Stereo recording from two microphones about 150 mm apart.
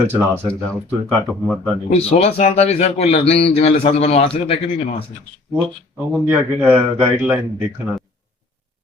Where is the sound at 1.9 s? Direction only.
45° left (ahead or behind).